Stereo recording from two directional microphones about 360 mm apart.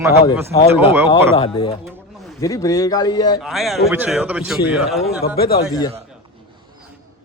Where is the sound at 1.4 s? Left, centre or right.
Centre.